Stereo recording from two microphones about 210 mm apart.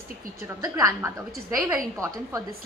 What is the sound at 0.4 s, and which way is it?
A woman's voice, 15° right (ahead or behind).